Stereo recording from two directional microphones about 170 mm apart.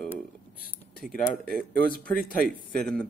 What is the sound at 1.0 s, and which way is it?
Speech, centre (ahead or behind).